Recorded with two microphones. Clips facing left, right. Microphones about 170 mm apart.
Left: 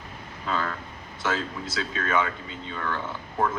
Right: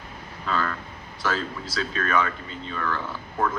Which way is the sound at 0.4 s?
25° left (ahead or behind).